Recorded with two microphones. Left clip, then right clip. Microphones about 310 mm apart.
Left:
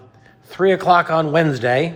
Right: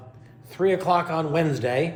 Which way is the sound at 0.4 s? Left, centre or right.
Left.